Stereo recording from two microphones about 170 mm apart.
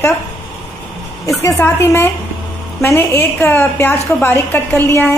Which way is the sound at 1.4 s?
15° left (ahead or behind).